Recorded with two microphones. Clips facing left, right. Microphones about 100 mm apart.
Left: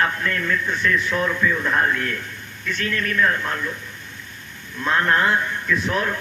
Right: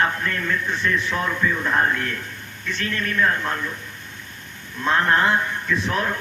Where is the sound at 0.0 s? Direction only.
25° right (ahead or behind).